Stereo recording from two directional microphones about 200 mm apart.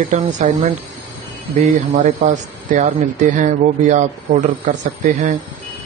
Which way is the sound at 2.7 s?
40° right (ahead or behind).